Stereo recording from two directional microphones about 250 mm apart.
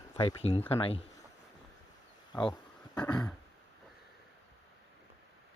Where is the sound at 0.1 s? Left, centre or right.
Left.